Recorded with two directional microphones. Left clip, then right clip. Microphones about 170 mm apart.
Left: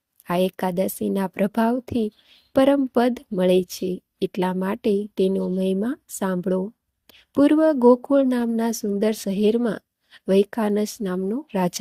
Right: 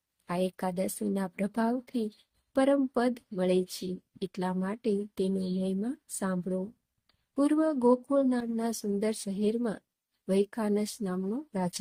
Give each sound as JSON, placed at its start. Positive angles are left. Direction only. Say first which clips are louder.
{"t": 0.3, "sound": "speech", "louder": "left 9 dB", "side_deg": 40}